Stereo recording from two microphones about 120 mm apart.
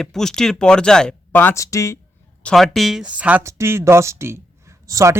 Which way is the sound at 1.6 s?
25° left (ahead or behind).